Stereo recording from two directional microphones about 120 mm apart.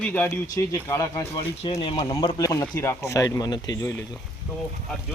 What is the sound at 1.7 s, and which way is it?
Speech, 45° left (ahead or behind).